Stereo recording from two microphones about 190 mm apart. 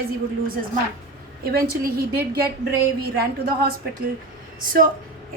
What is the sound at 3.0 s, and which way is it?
Speech, 50° right (ahead or behind).